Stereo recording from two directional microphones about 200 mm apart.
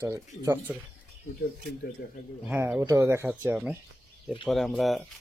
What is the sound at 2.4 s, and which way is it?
Speech, 10° right (ahead or behind).